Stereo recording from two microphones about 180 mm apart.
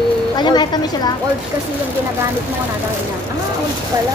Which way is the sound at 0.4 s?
25° left (ahead or behind).